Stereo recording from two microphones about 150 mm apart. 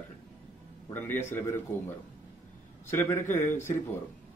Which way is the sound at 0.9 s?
15° left (ahead or behind).